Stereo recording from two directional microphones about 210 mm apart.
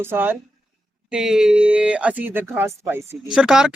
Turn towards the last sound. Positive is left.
turn(degrees=-5)  # may be behind; listen again after turning